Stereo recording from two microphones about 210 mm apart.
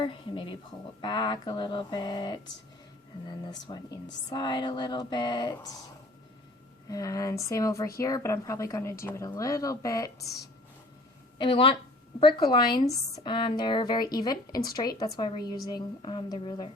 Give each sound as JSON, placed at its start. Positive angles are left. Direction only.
{"t": 0.0, "sound": "a woman's voice", "side_deg": 25}
{"t": 3.7, "sound": "a woman's voice", "side_deg": 20}
{"t": 6.9, "sound": "speech", "side_deg": 15}
{"t": 11.3, "sound": "a woman's voice", "side_deg": 25}